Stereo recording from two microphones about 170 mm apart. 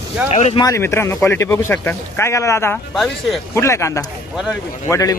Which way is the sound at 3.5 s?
15° left (ahead or behind).